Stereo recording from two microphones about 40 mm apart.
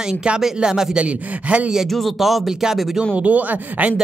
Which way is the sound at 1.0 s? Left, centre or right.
Right.